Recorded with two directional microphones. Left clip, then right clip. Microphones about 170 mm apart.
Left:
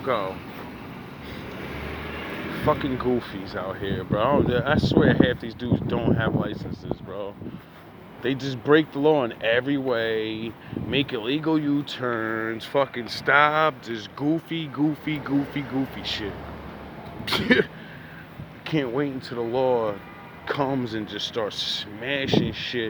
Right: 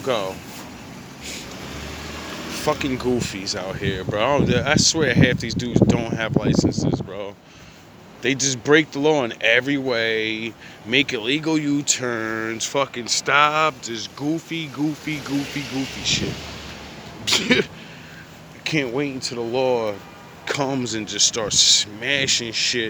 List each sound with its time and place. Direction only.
0.0 s speech: 45° right (ahead or behind)
2.6 s speech: 35° right (ahead or behind)
8.2 s speech: 30° right (ahead or behind); by 16.2 s 5° right (ahead or behind)
17.2 s speech: 10° right (ahead or behind)
18.6 s speech: 30° right (ahead or behind)